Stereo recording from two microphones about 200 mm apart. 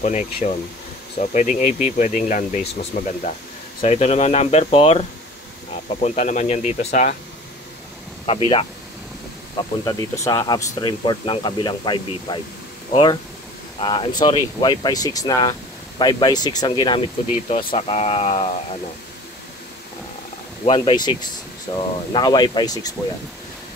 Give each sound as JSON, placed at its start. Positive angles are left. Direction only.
{"t": 0.0, "sound": "speech", "side_deg": 35}
{"t": 8.3, "sound": "speech", "side_deg": 25}
{"t": 20.6, "sound": "speech", "side_deg": 25}